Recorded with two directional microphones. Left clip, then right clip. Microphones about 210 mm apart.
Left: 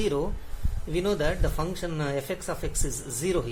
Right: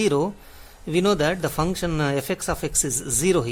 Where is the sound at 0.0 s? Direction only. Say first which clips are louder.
Right 6 dB; 50° right (ahead or behind).